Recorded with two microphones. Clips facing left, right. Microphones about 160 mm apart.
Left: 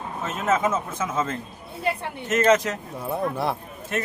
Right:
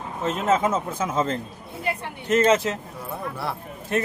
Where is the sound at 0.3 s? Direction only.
30° right (ahead or behind).